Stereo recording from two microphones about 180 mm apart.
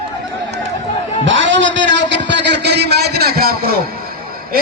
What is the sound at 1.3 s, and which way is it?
A man's voice, 90° right.